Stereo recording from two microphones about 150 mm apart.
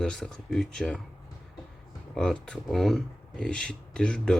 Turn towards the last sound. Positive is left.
turn(degrees=5)  # may be behind; listen again after turning